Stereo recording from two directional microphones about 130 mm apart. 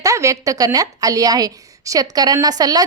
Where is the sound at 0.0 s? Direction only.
25° right (ahead or behind).